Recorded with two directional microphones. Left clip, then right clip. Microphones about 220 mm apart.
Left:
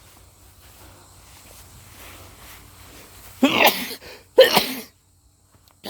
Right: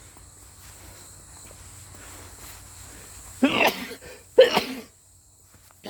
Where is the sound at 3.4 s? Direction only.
35° left (ahead or behind).